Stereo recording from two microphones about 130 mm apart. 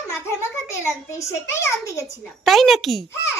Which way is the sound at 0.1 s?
20° left (ahead or behind).